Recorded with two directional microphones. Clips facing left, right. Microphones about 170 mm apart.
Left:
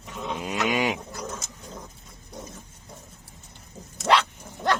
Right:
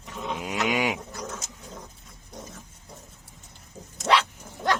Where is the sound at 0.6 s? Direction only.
10° right (ahead or behind).